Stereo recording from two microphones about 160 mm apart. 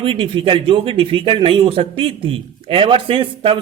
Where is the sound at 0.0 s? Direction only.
30° right (ahead or behind).